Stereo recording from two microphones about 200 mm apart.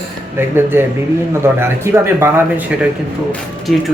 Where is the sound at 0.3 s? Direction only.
10° right (ahead or behind).